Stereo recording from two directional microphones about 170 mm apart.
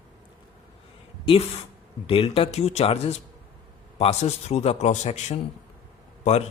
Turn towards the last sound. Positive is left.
turn(degrees=40)  # may be behind; listen again after turning